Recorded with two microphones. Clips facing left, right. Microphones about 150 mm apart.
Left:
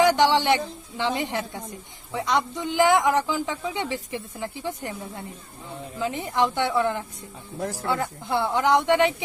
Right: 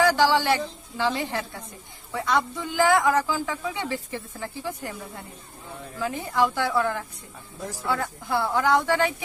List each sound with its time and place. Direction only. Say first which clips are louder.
0.0 s speech: left 1 dB; 20° left (ahead or behind)